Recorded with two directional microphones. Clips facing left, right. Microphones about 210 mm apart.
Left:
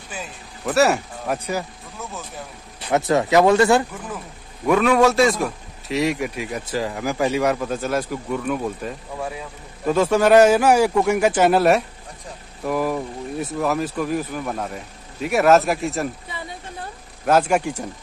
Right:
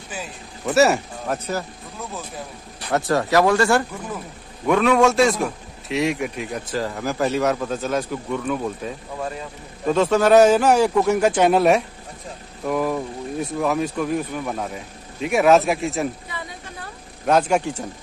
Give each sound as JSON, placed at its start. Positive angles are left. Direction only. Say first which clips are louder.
{"t": 0.1, "sound": "speech", "louder": "right 1 dB", "side_deg": 0}
{"t": 2.9, "sound": "speech", "louder": "left 2 dB", "side_deg": 20}
{"t": 4.6, "sound": "a man's voice", "louder": "even", "side_deg": 5}
{"t": 17.3, "sound": "a man's voice", "louder": "even", "side_deg": 5}